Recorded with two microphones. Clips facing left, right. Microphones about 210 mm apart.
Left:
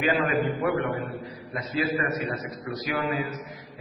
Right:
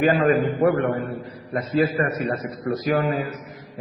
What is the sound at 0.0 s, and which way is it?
A man's voice, 50° right (ahead or behind).